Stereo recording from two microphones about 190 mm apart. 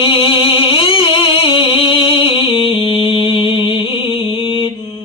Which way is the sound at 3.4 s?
25° left (ahead or behind).